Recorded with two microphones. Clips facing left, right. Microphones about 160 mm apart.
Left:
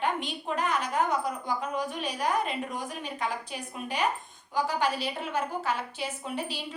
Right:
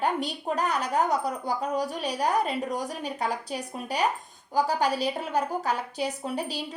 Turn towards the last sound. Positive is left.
turn(degrees=-40)  # may be behind; listen again after turning